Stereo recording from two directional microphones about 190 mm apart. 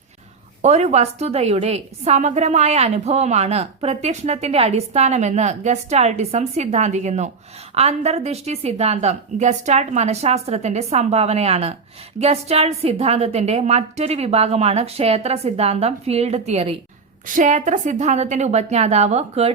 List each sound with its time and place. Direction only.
0.6 s a woman's voice: 35° right (ahead or behind)